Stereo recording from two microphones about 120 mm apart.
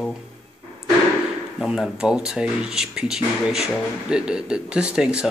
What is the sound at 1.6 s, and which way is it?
Speech, 5° right (ahead or behind).